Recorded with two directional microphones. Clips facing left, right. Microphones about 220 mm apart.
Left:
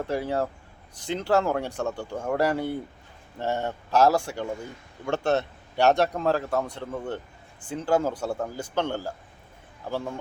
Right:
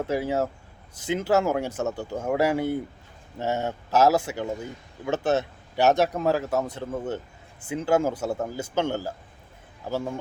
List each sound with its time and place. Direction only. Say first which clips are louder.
0.0 s speech: right 2 dB; 5° right (ahead or behind)